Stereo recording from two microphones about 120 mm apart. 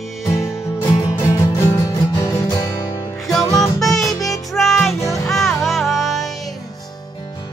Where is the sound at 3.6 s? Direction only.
Centre (ahead or behind).